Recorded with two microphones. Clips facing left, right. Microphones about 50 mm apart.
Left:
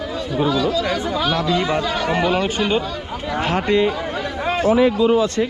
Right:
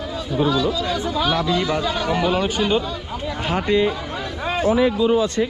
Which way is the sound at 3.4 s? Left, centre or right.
Left.